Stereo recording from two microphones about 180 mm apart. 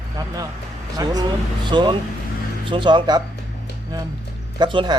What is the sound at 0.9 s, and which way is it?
Speech, 20° right (ahead or behind).